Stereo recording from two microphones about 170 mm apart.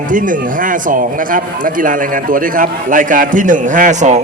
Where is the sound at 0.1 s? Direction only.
50° right (ahead or behind).